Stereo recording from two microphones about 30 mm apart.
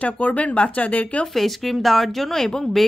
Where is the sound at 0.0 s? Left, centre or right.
Left.